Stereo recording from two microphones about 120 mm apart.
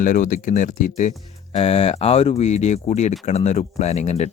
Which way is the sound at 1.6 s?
55° left (ahead or behind).